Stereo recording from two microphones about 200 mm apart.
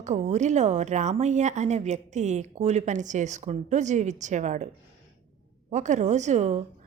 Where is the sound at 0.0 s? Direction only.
35° right (ahead or behind).